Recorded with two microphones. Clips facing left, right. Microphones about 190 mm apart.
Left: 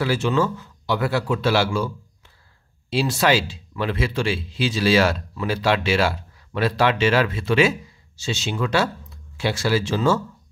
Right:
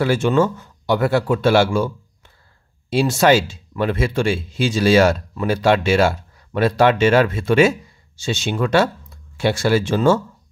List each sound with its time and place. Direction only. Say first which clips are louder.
0.0 s a man's voice: right 4 dB; 50° right (ahead or behind)